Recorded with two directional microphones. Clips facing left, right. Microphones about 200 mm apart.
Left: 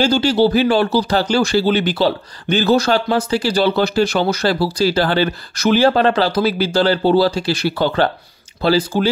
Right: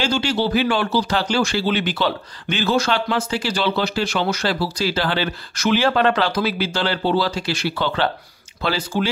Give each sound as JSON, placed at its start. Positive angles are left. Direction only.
{"t": 0.0, "sound": "speech", "side_deg": 35}